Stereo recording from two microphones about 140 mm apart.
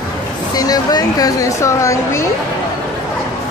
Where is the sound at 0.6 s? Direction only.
25° left (ahead or behind).